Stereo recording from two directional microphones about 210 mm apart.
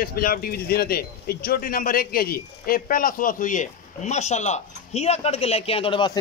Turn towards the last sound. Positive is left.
turn(degrees=25)  # may be behind; listen again after turning